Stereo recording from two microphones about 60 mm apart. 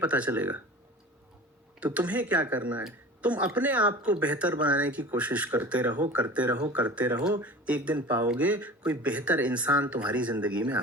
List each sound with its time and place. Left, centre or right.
0.0 s speech: right
1.8 s speech: right